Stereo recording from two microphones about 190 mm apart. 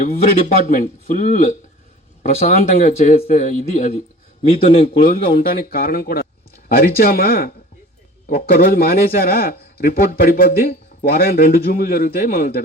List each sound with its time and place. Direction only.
0.0 s a man's voice: 45° left (ahead or behind)